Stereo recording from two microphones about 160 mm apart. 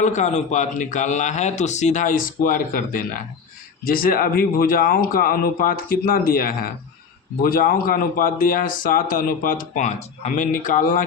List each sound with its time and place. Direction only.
0.0 s a man's voice: 45° left (ahead or behind)